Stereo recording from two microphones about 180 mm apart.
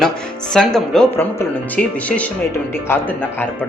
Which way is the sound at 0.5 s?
5° left (ahead or behind).